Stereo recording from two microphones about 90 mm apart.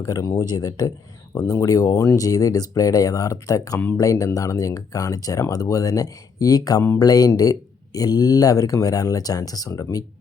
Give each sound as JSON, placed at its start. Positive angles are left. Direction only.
{"t": 0.0, "sound": "speech", "side_deg": 40}